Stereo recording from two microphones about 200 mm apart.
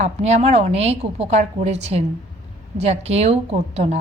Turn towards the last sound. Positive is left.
turn(degrees=-30)  # may be behind; listen again after turning